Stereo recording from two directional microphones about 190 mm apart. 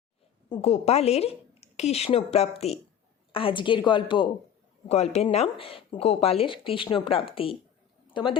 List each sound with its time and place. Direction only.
0.6 s a woman's voice: 35° left (ahead or behind)